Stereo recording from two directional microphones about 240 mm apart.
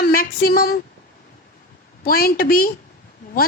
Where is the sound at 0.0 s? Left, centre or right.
Left.